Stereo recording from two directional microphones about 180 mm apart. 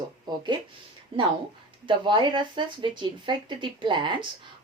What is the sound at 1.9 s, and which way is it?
Speech, 25° right (ahead or behind).